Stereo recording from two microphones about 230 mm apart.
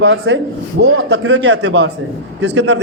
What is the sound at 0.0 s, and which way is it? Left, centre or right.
A man's voice, right.